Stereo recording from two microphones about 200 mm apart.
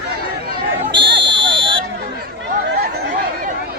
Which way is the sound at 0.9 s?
25° right (ahead or behind).